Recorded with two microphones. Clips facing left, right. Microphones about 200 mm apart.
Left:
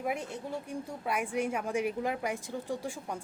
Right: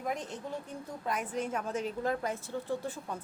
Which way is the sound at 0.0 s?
10° left (ahead or behind).